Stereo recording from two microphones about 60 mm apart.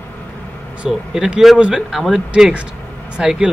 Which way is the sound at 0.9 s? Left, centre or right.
Centre.